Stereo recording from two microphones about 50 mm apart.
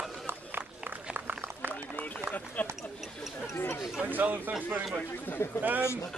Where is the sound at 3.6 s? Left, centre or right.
Left.